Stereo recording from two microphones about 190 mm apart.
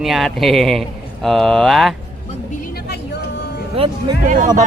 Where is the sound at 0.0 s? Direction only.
Centre (ahead or behind).